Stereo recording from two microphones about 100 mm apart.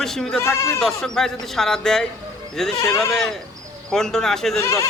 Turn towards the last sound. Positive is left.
turn(degrees=30)  # may be behind; listen again after turning